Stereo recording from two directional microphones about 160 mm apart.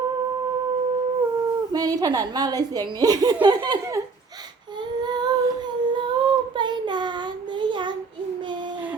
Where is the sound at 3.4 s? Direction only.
25° right (ahead or behind).